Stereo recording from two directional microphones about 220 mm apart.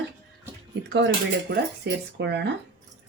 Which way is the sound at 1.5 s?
50° right (ahead or behind).